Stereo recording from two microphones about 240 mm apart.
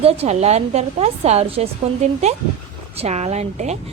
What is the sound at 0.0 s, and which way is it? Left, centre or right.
A woman's voice, right.